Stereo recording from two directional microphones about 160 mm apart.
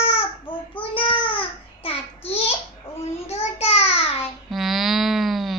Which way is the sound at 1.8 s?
40° left (ahead or behind).